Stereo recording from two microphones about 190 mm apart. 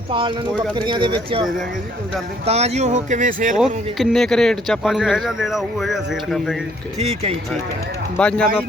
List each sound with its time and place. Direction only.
0.1 s speech: 25° right (ahead or behind)
2.5 s speech: 35° right (ahead or behind)
3.6 s speech: centre (ahead or behind)
7.0 s speech: 35° right (ahead or behind)
8.1 s speech: 5° left (ahead or behind)